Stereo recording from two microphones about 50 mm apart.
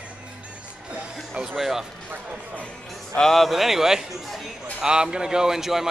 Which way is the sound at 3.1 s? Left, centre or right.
Centre.